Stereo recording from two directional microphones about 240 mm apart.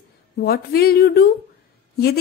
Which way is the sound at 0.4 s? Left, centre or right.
Left.